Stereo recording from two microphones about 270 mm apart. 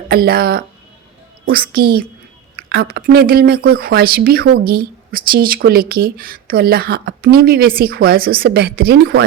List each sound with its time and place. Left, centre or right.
0.1 s speech: right